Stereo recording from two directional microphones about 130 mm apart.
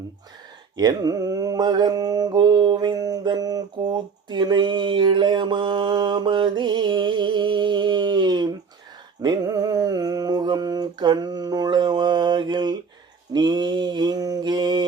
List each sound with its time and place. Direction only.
0.8 s mantra: 30° right (ahead or behind)
9.2 s a sound: 30° right (ahead or behind)
13.3 s mantra: 35° right (ahead or behind)